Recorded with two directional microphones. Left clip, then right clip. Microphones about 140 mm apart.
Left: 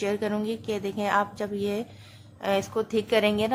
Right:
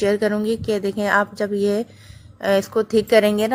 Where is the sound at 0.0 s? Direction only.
40° right (ahead or behind).